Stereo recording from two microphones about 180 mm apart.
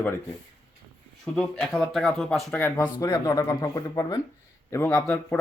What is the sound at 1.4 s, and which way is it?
Speech, 5° left (ahead or behind).